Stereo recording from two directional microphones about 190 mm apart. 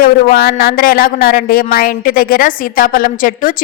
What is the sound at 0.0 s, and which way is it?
Speech, 50° left (ahead or behind).